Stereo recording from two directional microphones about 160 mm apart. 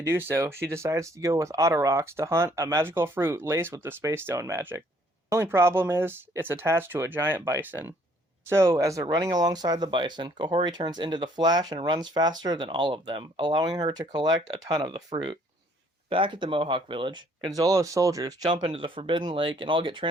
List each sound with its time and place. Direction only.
0.0 s speech: 15° right (ahead or behind); by 20.1 s 30° right (ahead or behind)